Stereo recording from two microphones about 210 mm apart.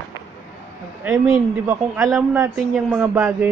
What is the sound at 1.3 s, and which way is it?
Speech, 15° right (ahead or behind).